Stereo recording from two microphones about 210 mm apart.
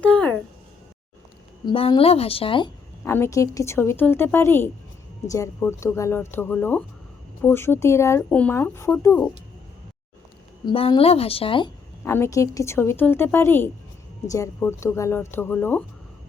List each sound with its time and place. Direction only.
0.0 s a sound: 5° left (ahead or behind)
1.6 s a woman's voice: 25° left (ahead or behind)
3.0 s speech: 10° left (ahead or behind)
10.7 s a woman's voice: 25° left (ahead or behind); by 15.8 s 10° left (ahead or behind)